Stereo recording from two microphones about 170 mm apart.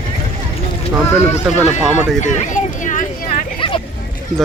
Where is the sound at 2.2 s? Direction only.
45° left (ahead or behind).